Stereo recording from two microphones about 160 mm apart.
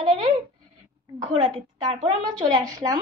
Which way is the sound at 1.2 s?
25° right (ahead or behind).